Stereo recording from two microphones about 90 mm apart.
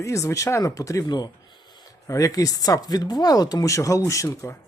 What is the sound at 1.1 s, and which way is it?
Speech, 45° left (ahead or behind).